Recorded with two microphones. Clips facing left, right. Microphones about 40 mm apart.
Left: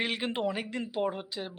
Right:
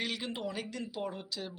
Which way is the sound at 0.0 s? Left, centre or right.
Left.